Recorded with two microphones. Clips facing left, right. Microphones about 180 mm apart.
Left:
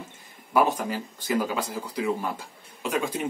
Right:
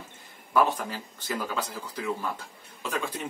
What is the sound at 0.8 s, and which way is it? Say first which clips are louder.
Speech: left 6 dB; 10° left (ahead or behind).